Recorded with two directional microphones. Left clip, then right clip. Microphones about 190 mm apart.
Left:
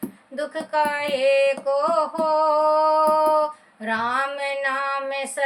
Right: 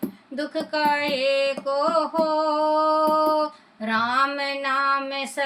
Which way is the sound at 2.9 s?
15° left (ahead or behind).